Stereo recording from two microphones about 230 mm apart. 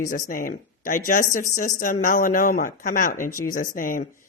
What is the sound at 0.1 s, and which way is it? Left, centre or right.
Speech, left.